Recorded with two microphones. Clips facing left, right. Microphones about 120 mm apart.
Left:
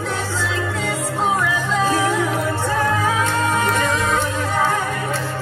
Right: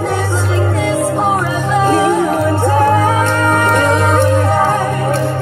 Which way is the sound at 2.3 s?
55° right (ahead or behind).